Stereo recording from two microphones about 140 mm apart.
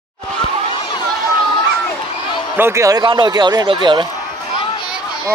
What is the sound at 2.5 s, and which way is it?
Speech, 20° right (ahead or behind).